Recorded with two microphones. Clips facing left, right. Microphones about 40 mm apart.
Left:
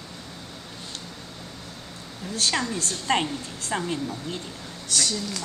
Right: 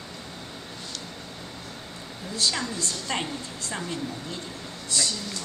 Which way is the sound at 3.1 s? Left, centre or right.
Left.